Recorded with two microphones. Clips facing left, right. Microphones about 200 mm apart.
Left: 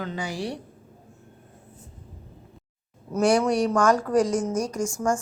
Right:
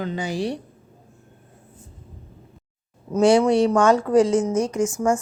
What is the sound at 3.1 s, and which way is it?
A woman's voice, 25° right (ahead or behind).